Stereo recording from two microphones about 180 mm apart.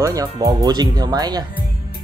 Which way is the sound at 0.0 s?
20° right (ahead or behind).